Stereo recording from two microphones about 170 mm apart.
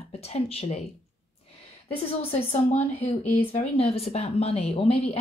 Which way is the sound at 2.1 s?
35° left (ahead or behind).